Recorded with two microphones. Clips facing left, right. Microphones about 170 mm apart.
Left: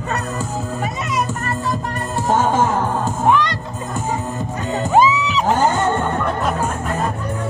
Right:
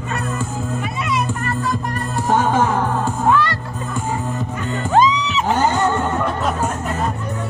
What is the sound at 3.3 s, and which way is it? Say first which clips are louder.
Music: left 1 dB; 20° left (ahead or behind).